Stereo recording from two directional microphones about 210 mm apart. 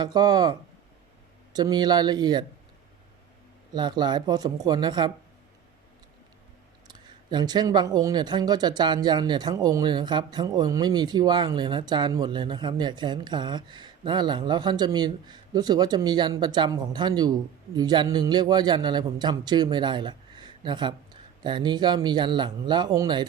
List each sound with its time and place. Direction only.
0.0 s speech: 20° right (ahead or behind)
1.5 s speech: 20° right (ahead or behind)
3.8 s speech: 20° right (ahead or behind)
6.8 s speech: 20° right (ahead or behind)